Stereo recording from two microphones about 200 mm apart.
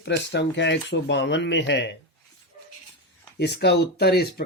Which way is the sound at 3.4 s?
55° left (ahead or behind).